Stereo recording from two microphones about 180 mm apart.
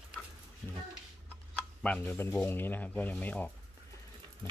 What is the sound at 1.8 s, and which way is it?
Speech, 5° left (ahead or behind).